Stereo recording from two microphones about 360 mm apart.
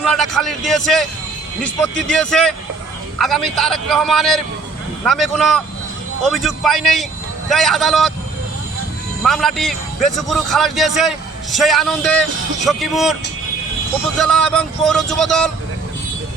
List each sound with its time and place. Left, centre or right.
0.0 s a man's voice: centre
2.0 s a man's voice: centre
9.2 s a man's voice: centre
14.2 s a man's voice: centre